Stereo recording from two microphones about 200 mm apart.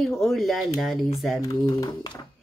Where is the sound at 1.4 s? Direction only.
20° left (ahead or behind).